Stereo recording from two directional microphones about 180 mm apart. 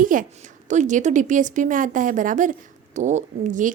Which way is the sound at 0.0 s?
50° right (ahead or behind).